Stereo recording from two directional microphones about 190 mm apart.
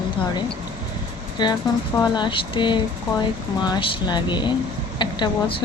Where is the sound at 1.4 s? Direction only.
20° left (ahead or behind).